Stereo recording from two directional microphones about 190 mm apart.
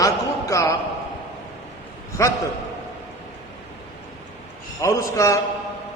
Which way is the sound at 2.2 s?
15° left (ahead or behind).